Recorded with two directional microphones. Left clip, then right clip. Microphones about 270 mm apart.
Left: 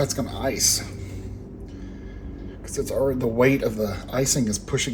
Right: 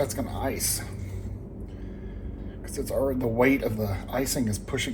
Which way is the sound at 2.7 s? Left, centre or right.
Left.